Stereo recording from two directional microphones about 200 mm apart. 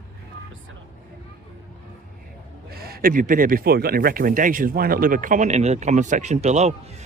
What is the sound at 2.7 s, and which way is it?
Speech, 50° right (ahead or behind).